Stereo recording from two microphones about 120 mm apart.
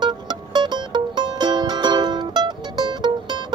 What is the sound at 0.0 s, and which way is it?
Music, 40° right (ahead or behind).